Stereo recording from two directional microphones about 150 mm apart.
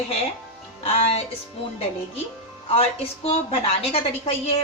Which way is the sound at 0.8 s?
40° left (ahead or behind).